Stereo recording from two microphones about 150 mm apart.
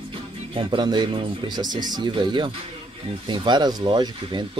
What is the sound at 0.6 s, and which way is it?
Speech, 30° right (ahead or behind).